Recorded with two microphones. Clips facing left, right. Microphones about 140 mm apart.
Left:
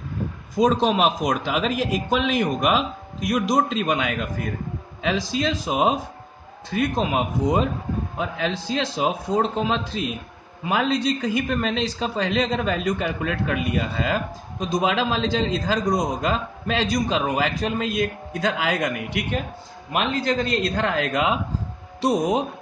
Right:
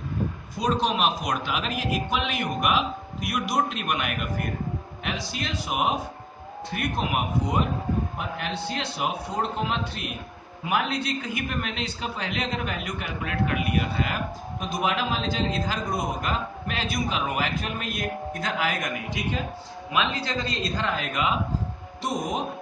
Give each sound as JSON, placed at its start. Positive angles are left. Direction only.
{"t": 0.6, "sound": "a man's voice", "side_deg": 90}
{"t": 19.9, "sound": "a man's voice", "side_deg": 50}
{"t": 22.0, "sound": "speech", "side_deg": 75}